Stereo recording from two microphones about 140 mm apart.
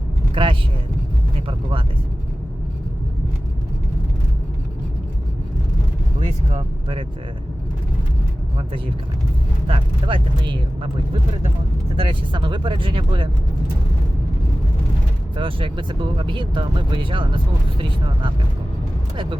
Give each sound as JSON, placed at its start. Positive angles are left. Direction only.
{"t": 0.4, "sound": "speech", "side_deg": -40}
{"t": 6.1, "sound": "a sound", "side_deg": -45}
{"t": 9.6, "sound": "speech", "side_deg": -40}
{"t": 11.9, "sound": "speech", "side_deg": -40}
{"t": 15.4, "sound": "speech", "side_deg": -40}